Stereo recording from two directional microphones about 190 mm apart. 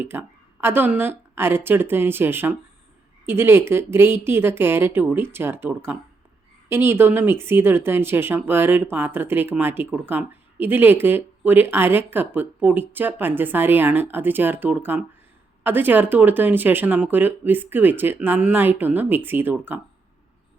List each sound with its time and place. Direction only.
0.0 s speech: 10° right (ahead or behind)